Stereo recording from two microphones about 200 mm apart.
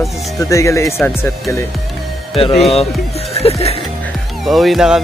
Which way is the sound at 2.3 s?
30° left (ahead or behind).